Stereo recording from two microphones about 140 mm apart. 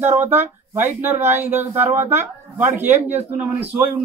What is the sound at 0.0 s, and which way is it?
Speech, 15° right (ahead or behind).